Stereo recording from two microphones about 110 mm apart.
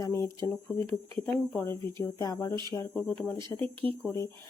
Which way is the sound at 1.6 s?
25° left (ahead or behind).